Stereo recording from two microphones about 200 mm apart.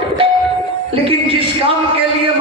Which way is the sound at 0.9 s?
25° right (ahead or behind).